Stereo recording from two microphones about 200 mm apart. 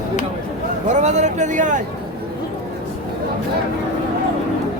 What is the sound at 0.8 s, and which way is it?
A man's voice, 35° right (ahead or behind).